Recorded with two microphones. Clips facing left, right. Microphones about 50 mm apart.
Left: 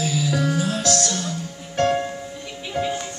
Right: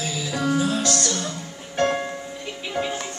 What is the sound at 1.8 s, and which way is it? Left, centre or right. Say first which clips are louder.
Music: left 2 dB; centre.